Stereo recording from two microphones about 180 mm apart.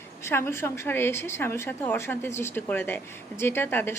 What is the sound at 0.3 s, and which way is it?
A woman's voice, 15° left (ahead or behind).